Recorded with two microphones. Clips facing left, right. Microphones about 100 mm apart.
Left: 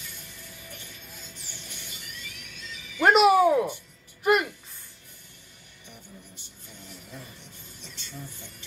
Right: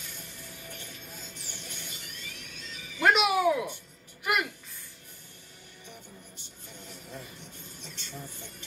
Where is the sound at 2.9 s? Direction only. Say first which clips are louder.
Left 6 dB; 40° left (ahead or behind).